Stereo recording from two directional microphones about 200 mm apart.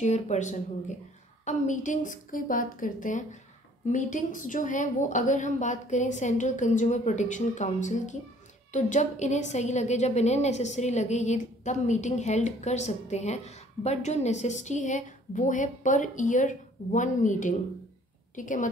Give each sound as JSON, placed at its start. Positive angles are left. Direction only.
{"t": 0.0, "sound": "a woman's voice", "side_deg": 35}